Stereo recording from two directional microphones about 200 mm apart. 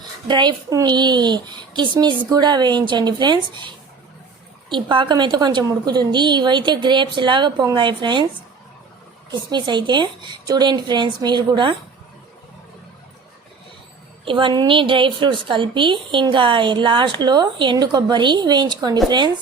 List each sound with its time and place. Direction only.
0.3 s a woman's voice: 20° right (ahead or behind)
9.3 s a woman's voice: 20° right (ahead or behind)
14.3 s a woman's voice: 25° right (ahead or behind)